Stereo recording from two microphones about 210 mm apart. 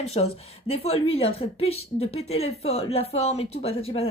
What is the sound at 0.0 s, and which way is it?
Speech, 30° left (ahead or behind).